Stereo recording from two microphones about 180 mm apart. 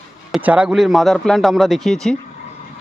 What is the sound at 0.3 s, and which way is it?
A man's voice, 5° right (ahead or behind).